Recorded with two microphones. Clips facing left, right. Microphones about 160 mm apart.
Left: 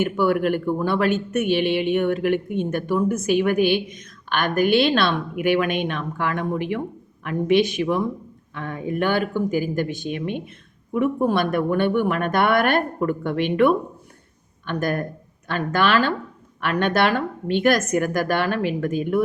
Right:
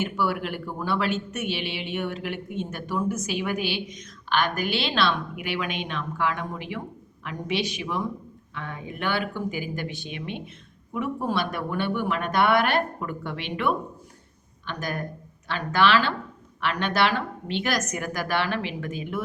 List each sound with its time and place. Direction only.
0.0 s speech: 50° left (ahead or behind)